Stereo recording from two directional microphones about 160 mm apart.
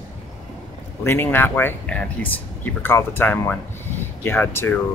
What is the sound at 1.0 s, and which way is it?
Speech, 15° left (ahead or behind).